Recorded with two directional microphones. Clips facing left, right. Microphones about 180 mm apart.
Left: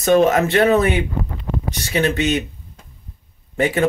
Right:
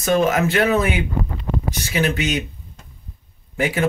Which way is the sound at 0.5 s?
30° left (ahead or behind).